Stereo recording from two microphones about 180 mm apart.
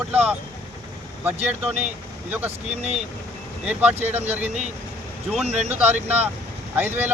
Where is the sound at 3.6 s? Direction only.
5° right (ahead or behind).